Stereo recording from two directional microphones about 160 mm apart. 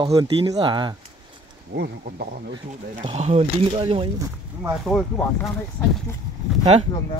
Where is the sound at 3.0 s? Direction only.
40° right (ahead or behind).